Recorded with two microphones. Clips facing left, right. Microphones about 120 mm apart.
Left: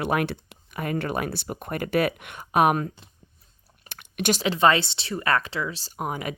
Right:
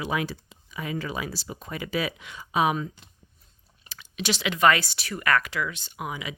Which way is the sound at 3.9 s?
55° left (ahead or behind).